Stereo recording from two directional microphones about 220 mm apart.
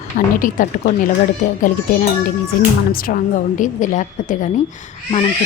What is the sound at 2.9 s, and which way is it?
A woman's voice, 40° left (ahead or behind).